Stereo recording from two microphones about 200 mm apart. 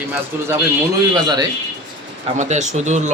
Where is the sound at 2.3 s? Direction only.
35° right (ahead or behind).